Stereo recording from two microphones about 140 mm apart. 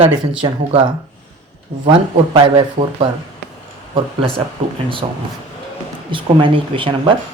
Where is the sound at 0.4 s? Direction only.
35° right (ahead or behind).